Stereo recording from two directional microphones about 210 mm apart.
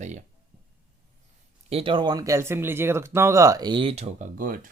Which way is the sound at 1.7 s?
25° right (ahead or behind).